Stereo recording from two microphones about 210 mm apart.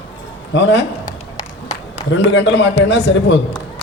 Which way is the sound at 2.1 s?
60° left (ahead or behind).